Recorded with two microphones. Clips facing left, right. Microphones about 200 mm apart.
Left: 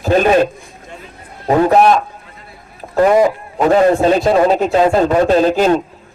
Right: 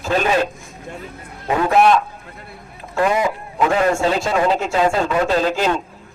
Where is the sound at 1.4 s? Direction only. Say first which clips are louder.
Left 4 dB; 35° left (ahead or behind).